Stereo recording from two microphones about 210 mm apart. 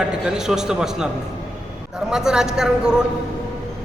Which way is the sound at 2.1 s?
5° right (ahead or behind).